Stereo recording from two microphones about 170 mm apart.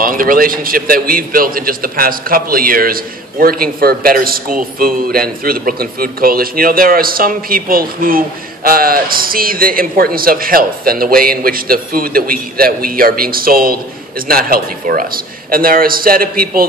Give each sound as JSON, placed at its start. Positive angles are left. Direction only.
{"t": 0.0, "sound": "a man's voice", "side_deg": -55}